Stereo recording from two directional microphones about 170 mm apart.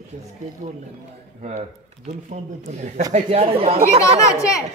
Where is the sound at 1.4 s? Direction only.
45° right (ahead or behind).